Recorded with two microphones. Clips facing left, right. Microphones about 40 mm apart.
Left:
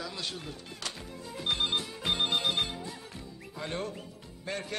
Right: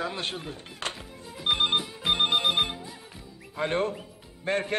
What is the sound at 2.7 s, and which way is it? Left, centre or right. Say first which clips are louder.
Music: left 1 dB; centre.